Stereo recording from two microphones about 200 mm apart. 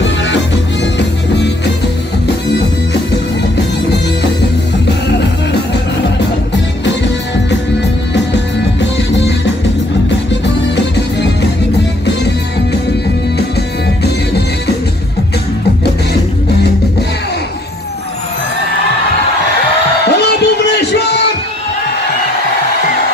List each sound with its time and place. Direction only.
0.9 s music: 60° left (ahead or behind)
20.1 s music: 55° left (ahead or behind)